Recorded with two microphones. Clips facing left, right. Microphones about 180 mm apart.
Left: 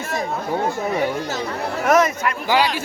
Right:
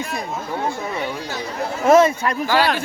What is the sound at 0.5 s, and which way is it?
Speech, 40° left (ahead or behind).